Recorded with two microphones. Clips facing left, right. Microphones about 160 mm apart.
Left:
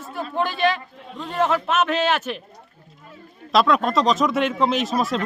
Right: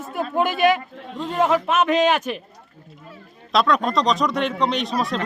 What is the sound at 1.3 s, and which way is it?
Speech, 5° right (ahead or behind).